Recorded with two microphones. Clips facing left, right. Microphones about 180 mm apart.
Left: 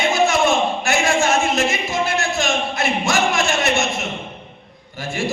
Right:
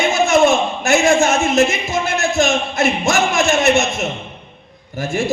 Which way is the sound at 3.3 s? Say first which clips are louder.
Right 5 dB; 20° right (ahead or behind).